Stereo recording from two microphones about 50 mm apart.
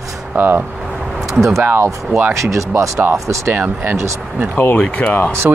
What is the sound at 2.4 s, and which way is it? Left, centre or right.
Speech, right.